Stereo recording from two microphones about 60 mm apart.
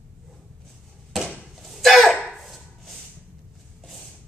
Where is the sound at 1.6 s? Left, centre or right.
Centre.